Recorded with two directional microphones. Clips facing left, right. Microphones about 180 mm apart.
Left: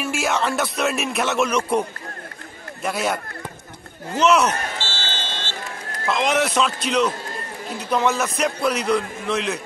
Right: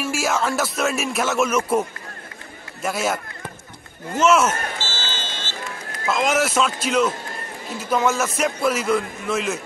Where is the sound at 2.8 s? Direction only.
Centre (ahead or behind).